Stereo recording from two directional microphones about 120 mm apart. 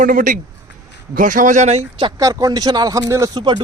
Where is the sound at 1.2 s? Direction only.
90° right; by 1.8 s 75° right (ahead or behind).